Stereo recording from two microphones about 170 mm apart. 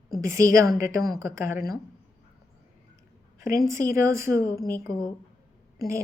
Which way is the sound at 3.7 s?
15° right (ahead or behind).